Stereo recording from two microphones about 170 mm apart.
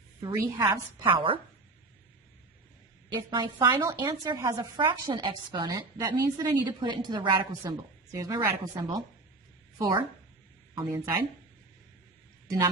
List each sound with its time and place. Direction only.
0.2 s a woman's voice: 25° right (ahead or behind)
1.1 s speech: 30° right (ahead or behind)
3.1 s a woman's voice: 25° right (ahead or behind)
4.8 s a woman's voice: 30° right (ahead or behind)